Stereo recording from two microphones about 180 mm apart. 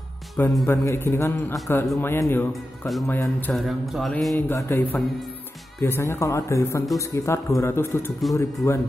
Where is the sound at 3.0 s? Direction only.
15° left (ahead or behind).